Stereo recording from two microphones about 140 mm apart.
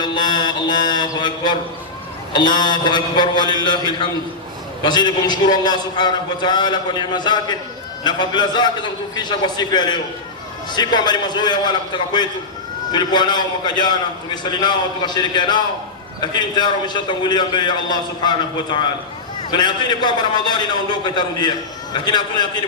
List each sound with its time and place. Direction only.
0.0 s mantra: 30° left (ahead or behind)
2.3 s a man's voice: 30° left (ahead or behind)